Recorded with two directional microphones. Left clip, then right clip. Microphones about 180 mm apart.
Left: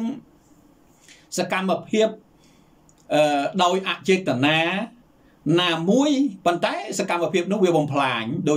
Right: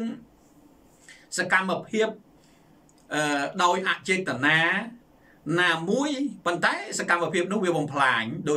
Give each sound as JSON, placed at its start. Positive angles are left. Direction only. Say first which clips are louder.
{"t": 1.0, "sound": "speech", "louder": "left 2 dB", "side_deg": 15}
{"t": 3.1, "sound": "speech", "louder": "left 7 dB", "side_deg": 15}